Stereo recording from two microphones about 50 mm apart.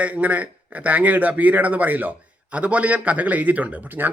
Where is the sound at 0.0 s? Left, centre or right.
Right.